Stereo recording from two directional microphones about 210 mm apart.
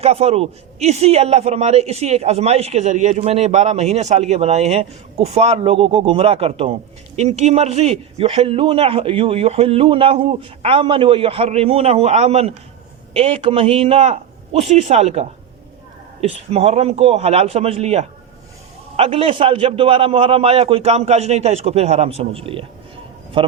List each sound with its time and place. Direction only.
0.0 s a man's voice: 30° right (ahead or behind)